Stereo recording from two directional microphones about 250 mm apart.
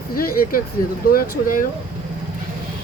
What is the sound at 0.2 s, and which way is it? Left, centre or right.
Speech, left.